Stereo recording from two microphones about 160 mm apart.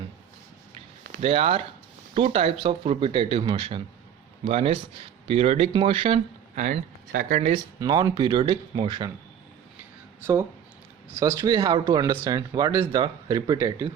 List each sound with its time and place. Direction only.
1.2 s speech: 40° right (ahead or behind)
7.3 s speech: 50° right (ahead or behind)
7.8 s speech: 25° right (ahead or behind)
11.1 s speech: 20° right (ahead or behind)